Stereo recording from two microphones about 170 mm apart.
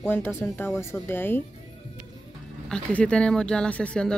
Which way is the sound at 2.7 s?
5° left (ahead or behind).